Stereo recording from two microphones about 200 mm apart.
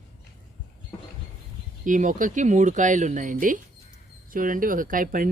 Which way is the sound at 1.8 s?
40° right (ahead or behind).